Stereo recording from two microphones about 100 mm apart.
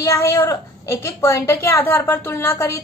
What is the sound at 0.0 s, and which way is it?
A woman's voice, 30° left (ahead or behind).